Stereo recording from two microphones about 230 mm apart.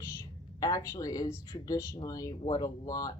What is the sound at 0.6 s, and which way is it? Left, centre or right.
Speech, centre.